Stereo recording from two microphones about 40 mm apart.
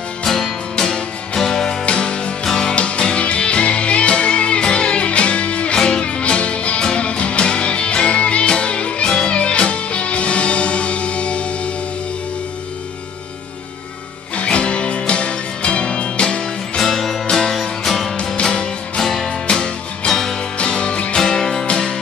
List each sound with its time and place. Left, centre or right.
0.2 s music: centre
1.9 s music: left
2.4 s music: centre
2.7 s music: left
14.3 s music: left
16.7 s music: centre
18.3 s music: left
18.9 s music: centre
19.4 s music: left
20.1 s music: centre
20.5 s music: left
21.2 s music: centre